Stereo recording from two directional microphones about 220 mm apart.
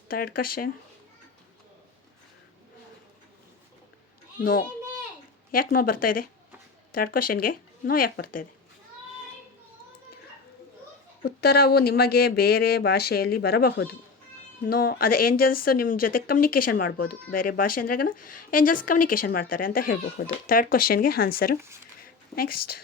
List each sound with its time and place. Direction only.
0.1 s speech: 40° left (ahead or behind)
4.4 s a child's voice: 40° left (ahead or behind)
11.2 s speech: 45° left (ahead or behind)